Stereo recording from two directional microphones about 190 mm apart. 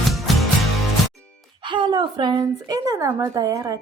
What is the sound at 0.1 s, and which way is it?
Music, centre (ahead or behind).